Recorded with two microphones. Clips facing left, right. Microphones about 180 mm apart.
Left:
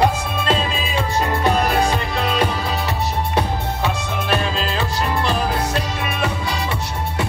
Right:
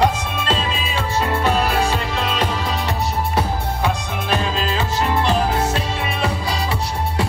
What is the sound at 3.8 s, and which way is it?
Music, 15° right (ahead or behind).